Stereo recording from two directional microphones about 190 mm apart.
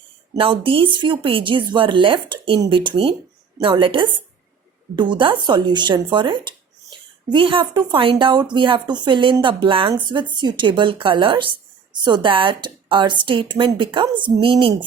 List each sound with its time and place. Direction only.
0.3 s speech: 25° right (ahead or behind)